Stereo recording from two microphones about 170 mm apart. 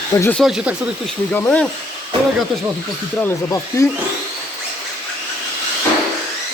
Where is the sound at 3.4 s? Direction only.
15° left (ahead or behind).